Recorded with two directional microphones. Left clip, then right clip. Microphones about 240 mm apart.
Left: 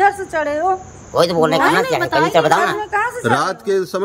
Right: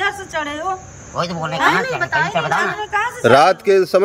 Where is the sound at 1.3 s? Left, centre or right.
Left.